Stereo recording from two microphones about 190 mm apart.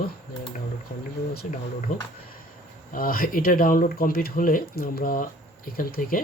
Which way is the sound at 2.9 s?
50° left (ahead or behind).